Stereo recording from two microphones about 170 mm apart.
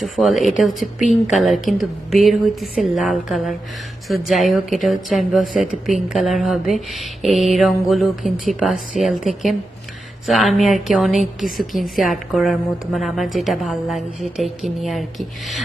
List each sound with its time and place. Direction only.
0.0 s a woman's voice: centre (ahead or behind)